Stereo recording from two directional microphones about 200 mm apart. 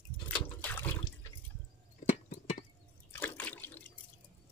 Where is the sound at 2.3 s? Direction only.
35° left (ahead or behind).